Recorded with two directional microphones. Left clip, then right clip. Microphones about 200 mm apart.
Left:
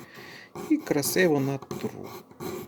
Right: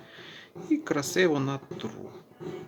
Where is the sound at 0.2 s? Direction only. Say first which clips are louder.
Left 4 dB; 40° left (ahead or behind).